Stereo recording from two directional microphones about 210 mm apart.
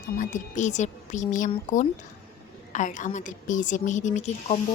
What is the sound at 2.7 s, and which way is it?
Speech, 35° left (ahead or behind).